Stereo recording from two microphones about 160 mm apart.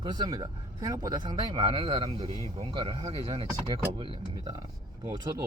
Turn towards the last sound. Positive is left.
turn(degrees=-20)  # may be behind; listen again after turning